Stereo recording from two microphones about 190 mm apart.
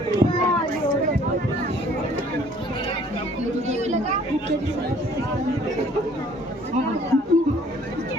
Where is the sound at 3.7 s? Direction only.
35° right (ahead or behind).